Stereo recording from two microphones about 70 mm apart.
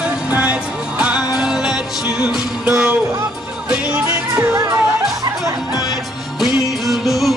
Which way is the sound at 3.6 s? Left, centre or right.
Centre.